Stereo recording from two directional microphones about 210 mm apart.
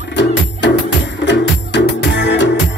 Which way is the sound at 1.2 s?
55° left (ahead or behind).